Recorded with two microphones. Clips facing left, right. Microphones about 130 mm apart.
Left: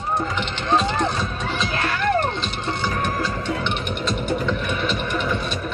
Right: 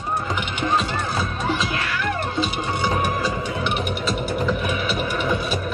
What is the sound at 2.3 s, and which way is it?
Music, 10° right (ahead or behind).